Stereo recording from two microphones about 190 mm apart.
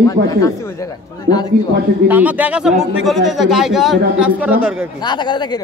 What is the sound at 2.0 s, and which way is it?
A man's voice, 10° right (ahead or behind).